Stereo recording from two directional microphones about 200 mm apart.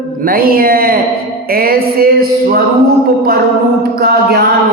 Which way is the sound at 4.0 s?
50° right (ahead or behind).